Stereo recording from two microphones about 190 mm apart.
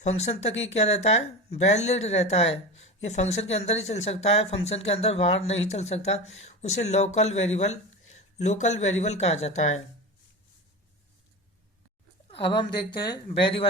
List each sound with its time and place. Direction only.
0.0 s a woman's voice: 35° left (ahead or behind)
12.3 s a woman's voice: 25° left (ahead or behind)